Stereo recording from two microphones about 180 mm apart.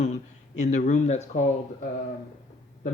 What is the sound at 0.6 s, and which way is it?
Speech, 40° left (ahead or behind).